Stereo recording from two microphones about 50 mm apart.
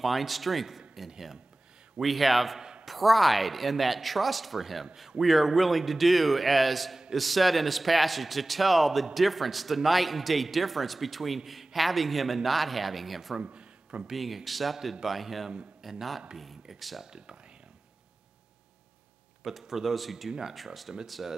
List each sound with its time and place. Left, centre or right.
0.0 s a man's voice: centre
13.4 s a sound: right
14.1 s a man's voice: centre
17.0 s speech: centre
19.4 s a man's voice: centre